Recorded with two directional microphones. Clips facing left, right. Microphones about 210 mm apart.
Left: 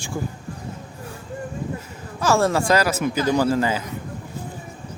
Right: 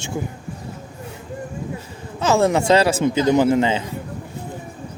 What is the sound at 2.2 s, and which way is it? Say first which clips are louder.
Speech: right 2 dB; 20° right (ahead or behind).